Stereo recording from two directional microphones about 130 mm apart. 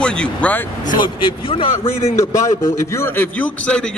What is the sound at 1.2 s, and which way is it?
Speech, 45° left (ahead or behind).